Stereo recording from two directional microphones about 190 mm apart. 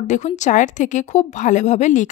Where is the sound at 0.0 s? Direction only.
40° left (ahead or behind).